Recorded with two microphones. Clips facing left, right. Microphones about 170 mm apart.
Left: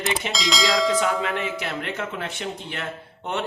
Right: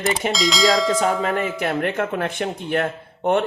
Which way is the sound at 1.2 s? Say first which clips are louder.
Right 5 dB; 45° right (ahead or behind).